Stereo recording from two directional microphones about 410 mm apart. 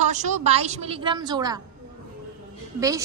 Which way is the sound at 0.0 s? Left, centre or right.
Centre.